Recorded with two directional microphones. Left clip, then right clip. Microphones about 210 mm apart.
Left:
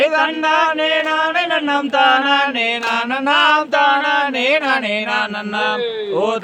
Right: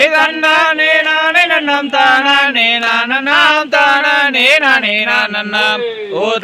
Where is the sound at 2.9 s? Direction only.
5° left (ahead or behind).